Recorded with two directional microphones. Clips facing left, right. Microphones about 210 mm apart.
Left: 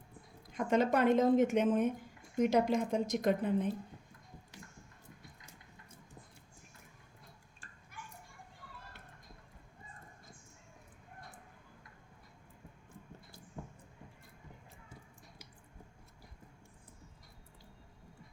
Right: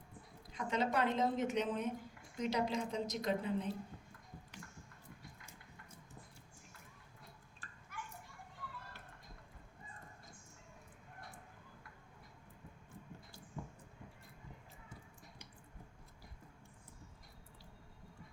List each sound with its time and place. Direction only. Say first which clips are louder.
0.5 s a woman's voice: left 6 dB; 50° left (ahead or behind)